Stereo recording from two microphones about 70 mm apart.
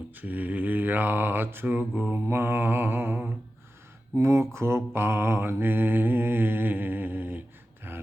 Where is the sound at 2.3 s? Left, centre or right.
Right.